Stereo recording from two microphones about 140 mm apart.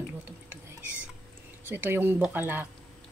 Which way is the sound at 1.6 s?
15° right (ahead or behind).